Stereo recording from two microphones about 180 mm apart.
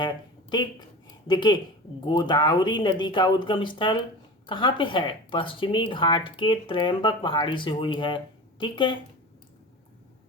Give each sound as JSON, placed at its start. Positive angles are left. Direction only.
{"t": 0.5, "sound": "speech", "side_deg": 25}